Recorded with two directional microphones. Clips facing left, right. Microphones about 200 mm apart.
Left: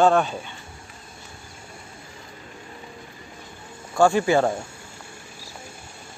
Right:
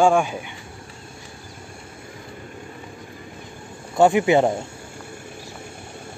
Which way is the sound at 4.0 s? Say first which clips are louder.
Right 2 dB; 20° right (ahead or behind).